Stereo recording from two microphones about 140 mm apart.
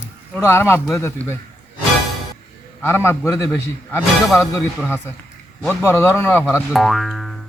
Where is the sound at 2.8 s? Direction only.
15° left (ahead or behind).